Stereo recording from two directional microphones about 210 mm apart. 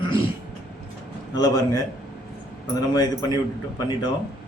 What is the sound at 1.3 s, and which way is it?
Speech, 20° left (ahead or behind).